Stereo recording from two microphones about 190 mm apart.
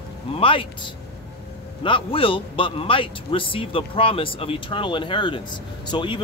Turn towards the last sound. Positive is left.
turn(degrees=25)  # may be behind; listen again after turning